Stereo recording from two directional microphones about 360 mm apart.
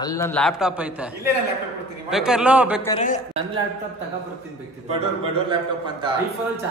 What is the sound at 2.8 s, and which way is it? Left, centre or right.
Speech, centre.